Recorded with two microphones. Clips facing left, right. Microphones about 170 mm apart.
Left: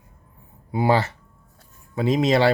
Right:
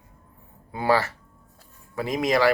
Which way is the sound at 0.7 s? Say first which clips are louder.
Left 2 dB; 15° left (ahead or behind).